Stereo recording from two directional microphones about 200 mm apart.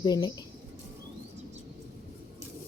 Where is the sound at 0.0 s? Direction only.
20° left (ahead or behind).